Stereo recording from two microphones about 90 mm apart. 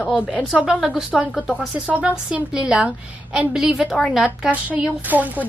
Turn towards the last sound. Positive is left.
turn(degrees=-20)  # may be behind; listen again after turning